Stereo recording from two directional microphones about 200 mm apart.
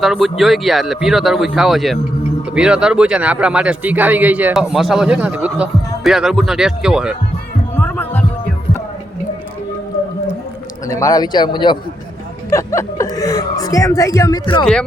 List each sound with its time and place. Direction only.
0.0 s a man's voice: centre (ahead or behind)
7.8 s heart sounds: 5° left (ahead or behind)
10.8 s a man's voice: 15° left (ahead or behind)
14.6 s a man's voice: 5° left (ahead or behind)